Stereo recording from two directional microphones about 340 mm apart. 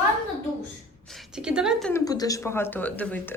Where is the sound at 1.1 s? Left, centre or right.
Centre.